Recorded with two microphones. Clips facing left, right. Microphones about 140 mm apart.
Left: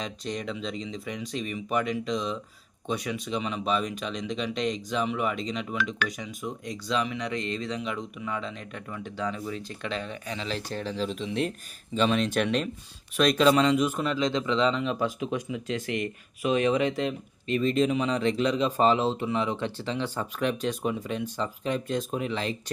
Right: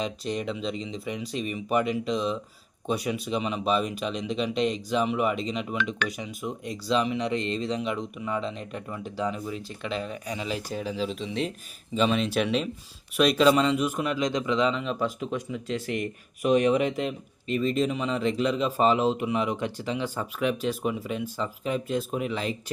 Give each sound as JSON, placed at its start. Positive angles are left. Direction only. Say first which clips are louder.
{"t": 0.0, "sound": "speech", "louder": "right 3 dB", "side_deg": -5}
{"t": 6.8, "sound": "speech", "louder": "right 4 dB", "side_deg": -30}
{"t": 7.8, "sound": "speech", "louder": "right 3 dB", "side_deg": -5}
{"t": 8.4, "sound": "speech", "louder": "right 4 dB", "side_deg": -35}
{"t": 9.0, "sound": "speech", "louder": "right 1 dB", "side_deg": -5}